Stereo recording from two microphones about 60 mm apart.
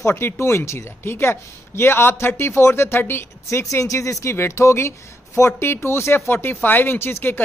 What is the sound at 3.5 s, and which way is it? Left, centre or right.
A woman's voice, left.